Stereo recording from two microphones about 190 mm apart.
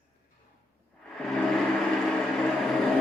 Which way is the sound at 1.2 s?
5° left (ahead or behind).